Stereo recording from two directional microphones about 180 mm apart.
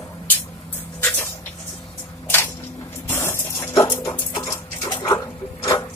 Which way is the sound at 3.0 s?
15° left (ahead or behind).